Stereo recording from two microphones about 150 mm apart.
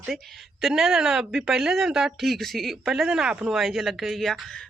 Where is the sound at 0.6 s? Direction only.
Centre (ahead or behind).